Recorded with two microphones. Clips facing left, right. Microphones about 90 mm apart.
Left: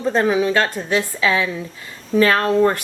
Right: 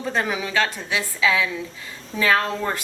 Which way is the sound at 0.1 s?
35° left (ahead or behind).